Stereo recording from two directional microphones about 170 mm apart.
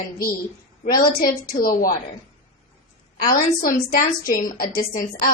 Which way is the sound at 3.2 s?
55° left (ahead or behind).